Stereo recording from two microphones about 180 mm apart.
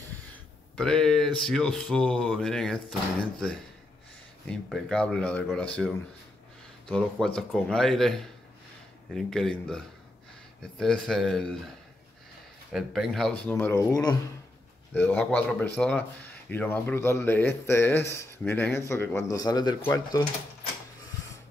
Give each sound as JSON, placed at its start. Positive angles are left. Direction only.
{"t": 0.7, "sound": "speech", "side_deg": 5}
{"t": 6.9, "sound": "speech", "side_deg": 5}
{"t": 12.7, "sound": "speech", "side_deg": 0}